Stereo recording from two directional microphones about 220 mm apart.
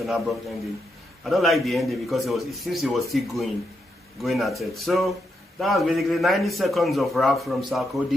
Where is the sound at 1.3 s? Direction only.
Centre (ahead or behind).